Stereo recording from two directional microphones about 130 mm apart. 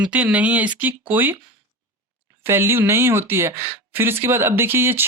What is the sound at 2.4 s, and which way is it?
Speech, 20° right (ahead or behind).